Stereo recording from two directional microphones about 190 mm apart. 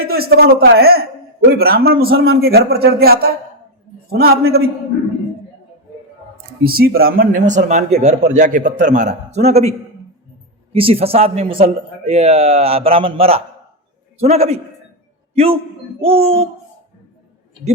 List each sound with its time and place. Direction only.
0.0 s a man's voice: 55° right (ahead or behind)
6.7 s a man's voice: 50° right (ahead or behind); by 9.7 s 35° right (ahead or behind)
10.8 s a man's voice: 30° right (ahead or behind)
16.0 s a man's voice: 30° right (ahead or behind)